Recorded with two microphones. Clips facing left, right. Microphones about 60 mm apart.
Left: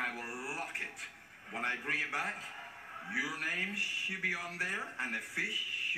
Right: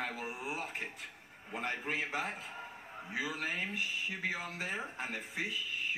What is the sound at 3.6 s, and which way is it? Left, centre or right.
A man's voice, centre.